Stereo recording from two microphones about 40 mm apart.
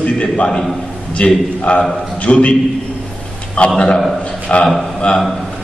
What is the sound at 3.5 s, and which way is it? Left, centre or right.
A man's voice, left.